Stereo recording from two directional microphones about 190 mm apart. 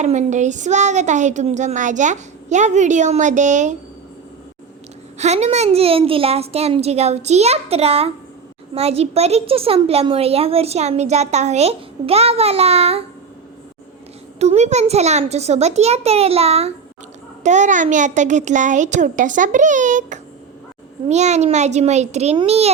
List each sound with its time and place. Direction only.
0.0 s a woman's voice: 40° right (ahead or behind)
5.1 s a woman's voice: 35° right (ahead or behind)
14.3 s a woman's voice: 35° right (ahead or behind)